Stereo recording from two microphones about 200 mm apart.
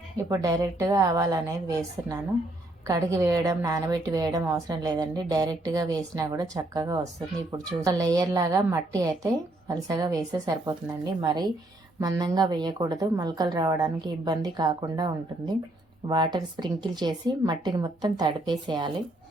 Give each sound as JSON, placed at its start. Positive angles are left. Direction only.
{"t": 0.3, "sound": "a woman's voice", "side_deg": -15}